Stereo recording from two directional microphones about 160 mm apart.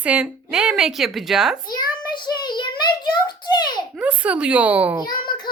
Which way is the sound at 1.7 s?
25° left (ahead or behind).